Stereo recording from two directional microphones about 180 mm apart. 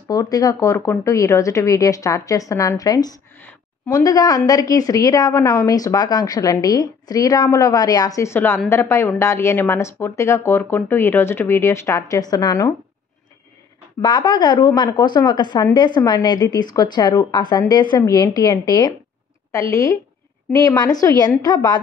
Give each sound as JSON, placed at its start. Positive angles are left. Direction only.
{"t": 0.1, "sound": "a woman's voice", "side_deg": 20}
{"t": 14.0, "sound": "a woman's voice", "side_deg": 25}